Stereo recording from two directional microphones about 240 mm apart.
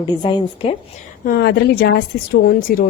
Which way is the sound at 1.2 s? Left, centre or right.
Left.